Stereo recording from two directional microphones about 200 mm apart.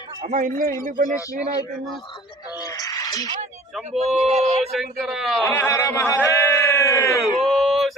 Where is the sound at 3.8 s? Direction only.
35° right (ahead or behind).